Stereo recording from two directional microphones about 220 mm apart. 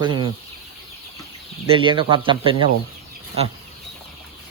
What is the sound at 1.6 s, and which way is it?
Speech, 25° right (ahead or behind).